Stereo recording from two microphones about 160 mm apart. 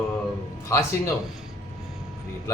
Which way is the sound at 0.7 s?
15° left (ahead or behind).